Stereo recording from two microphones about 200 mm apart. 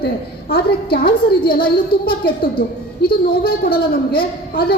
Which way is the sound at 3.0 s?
50° left (ahead or behind).